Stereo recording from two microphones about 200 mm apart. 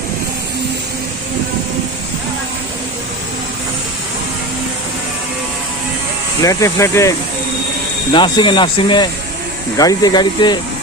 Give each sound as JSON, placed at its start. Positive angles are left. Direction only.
{"t": 6.4, "sound": "speech", "side_deg": 15}
{"t": 8.1, "sound": "speech", "side_deg": 25}